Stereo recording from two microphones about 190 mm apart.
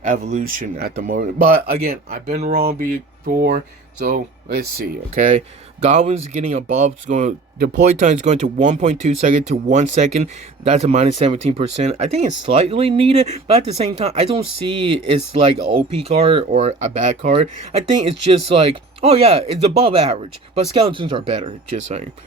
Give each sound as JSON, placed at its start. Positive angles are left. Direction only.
{"t": 0.1, "sound": "speech", "side_deg": -40}
{"t": 2.4, "sound": "a sound", "side_deg": -55}
{"t": 2.7, "sound": "speech", "side_deg": -50}
{"t": 5.9, "sound": "speech", "side_deg": -40}